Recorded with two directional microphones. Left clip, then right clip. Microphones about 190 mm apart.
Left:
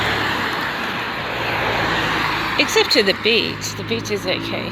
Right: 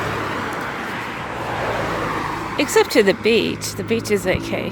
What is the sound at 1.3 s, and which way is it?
Vehicle, 25° left (ahead or behind).